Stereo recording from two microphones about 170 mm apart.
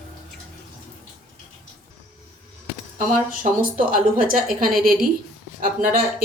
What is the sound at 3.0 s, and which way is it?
A woman's voice, 50° right (ahead or behind).